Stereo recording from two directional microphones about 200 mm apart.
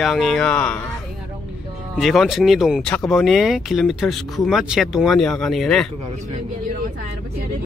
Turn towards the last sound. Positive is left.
turn(degrees=0)  # may be behind; listen again after turning